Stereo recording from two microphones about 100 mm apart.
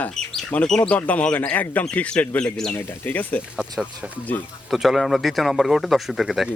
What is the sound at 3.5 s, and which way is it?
Speech, 5° right (ahead or behind).